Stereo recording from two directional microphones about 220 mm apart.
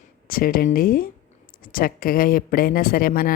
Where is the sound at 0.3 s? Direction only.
40° left (ahead or behind).